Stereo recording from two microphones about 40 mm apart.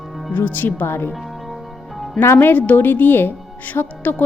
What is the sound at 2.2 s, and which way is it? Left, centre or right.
Speech, left.